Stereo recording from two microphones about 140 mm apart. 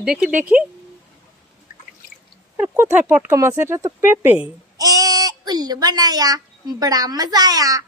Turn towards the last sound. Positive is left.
turn(degrees=-25)  # may be behind; listen again after turning